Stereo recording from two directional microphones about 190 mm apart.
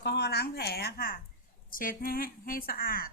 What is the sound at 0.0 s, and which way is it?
A woman's voice, 60° left (ahead or behind).